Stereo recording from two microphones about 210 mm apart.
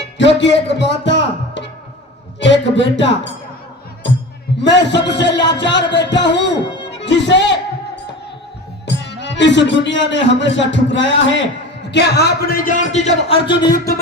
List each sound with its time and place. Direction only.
0.2 s speech: 60° left (ahead or behind)
4.6 s speech: 55° left (ahead or behind)
8.9 s speech: 55° left (ahead or behind); by 13.9 s 20° left (ahead or behind)